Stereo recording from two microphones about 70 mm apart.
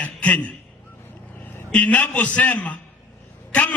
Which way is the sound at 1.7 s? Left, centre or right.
Centre.